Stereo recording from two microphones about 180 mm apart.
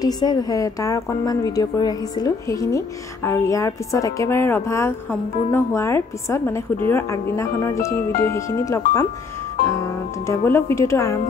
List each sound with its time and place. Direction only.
0.0 s a woman's voice: 20° left (ahead or behind)
10.2 s a woman's voice: 15° left (ahead or behind)